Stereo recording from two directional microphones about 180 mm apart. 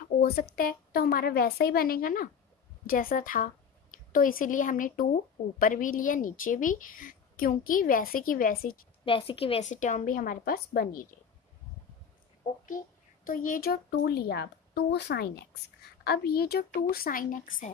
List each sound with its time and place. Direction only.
0.2 s a woman's voice: 55° left (ahead or behind)
9.0 s a woman's voice: 30° left (ahead or behind); by 11.1 s 55° left (ahead or behind)
12.6 s a woman's voice: 50° left (ahead or behind)